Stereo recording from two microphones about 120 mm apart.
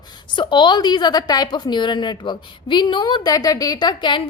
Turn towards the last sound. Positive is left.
turn(degrees=40)  # may be behind; listen again after turning